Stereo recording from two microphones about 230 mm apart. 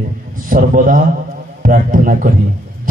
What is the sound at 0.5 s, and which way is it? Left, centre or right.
A man's voice, right.